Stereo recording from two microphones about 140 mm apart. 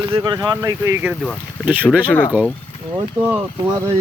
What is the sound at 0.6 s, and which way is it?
Speech, 20° right (ahead or behind).